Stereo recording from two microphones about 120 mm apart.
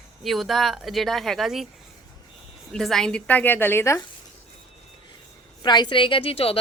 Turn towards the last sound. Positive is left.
turn(degrees=50)  # may be behind; listen again after turning